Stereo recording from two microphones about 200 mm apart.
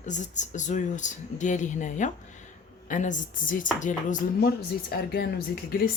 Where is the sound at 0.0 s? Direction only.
35° left (ahead or behind).